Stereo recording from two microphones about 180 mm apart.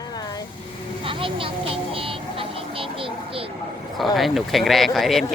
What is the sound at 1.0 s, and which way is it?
Vehicle, 30° right (ahead or behind).